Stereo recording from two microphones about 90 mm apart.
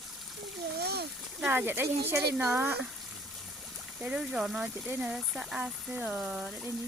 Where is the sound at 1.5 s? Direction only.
20° right (ahead or behind).